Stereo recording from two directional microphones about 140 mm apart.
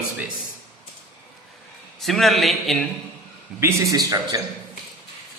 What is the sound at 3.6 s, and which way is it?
Speech, 20° right (ahead or behind).